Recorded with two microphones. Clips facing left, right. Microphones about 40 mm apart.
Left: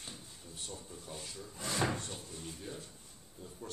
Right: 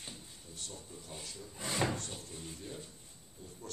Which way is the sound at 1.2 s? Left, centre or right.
Centre.